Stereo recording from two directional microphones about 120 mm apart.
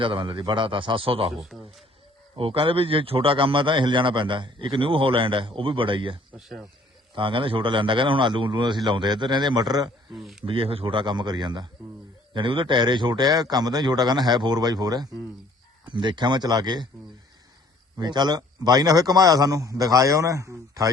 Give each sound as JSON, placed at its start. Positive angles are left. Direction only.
{"t": 0.0, "sound": "a man's voice", "side_deg": -45}
{"t": 1.4, "sound": "speech", "side_deg": -5}
{"t": 2.4, "sound": "a man's voice", "side_deg": -50}
{"t": 6.3, "sound": "speech", "side_deg": -5}
{"t": 7.2, "sound": "a man's voice", "side_deg": -45}
{"t": 10.1, "sound": "speech", "side_deg": 0}
{"t": 10.4, "sound": "a man's voice", "side_deg": -50}
{"t": 17.9, "sound": "a man's voice", "side_deg": -35}